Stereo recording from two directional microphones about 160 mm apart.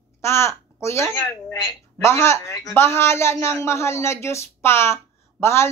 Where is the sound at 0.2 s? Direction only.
15° left (ahead or behind).